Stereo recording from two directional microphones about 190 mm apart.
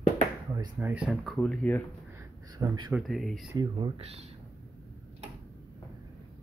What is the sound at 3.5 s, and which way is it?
Speech, 30° right (ahead or behind).